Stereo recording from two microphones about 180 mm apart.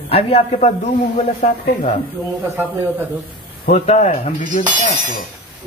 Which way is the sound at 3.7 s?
40° left (ahead or behind).